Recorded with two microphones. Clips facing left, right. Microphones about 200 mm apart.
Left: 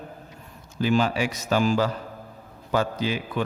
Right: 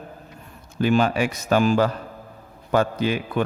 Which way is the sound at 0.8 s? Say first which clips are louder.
Right 3 dB; 55° right (ahead or behind).